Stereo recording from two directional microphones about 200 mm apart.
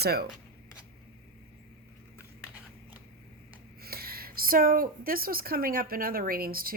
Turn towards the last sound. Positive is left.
turn(degrees=-45)  # may be behind; listen again after turning